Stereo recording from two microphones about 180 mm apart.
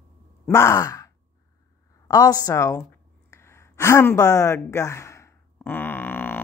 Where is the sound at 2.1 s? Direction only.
20° left (ahead or behind).